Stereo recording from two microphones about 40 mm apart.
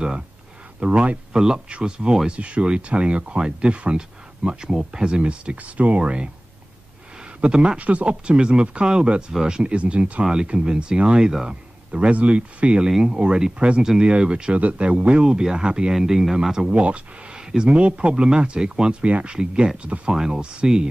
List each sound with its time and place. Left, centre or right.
0.8 s speech: right
1.3 s speech: centre
7.4 s speech: right
14.5 s speech: right; by 16.8 s centre
16.8 s speech: right